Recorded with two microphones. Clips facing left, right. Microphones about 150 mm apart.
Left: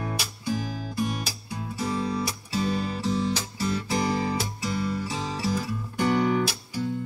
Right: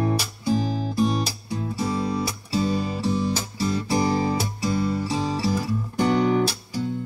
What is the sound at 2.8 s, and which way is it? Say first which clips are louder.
Music: right 3 dB; 15° right (ahead or behind).